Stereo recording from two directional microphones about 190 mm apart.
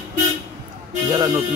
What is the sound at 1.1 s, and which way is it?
Speech, 25° right (ahead or behind).